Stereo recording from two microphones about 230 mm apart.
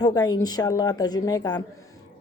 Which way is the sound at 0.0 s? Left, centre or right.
Centre.